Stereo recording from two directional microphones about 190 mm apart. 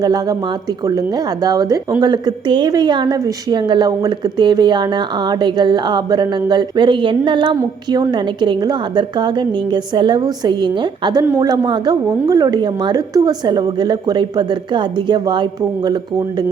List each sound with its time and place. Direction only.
0.0 s a woman's voice: 20° right (ahead or behind)